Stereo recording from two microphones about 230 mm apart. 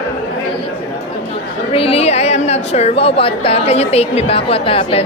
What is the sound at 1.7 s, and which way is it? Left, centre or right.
A woman's voice, left.